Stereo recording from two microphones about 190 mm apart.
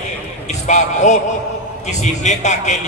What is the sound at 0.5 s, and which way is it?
A man's voice, 40° left (ahead or behind).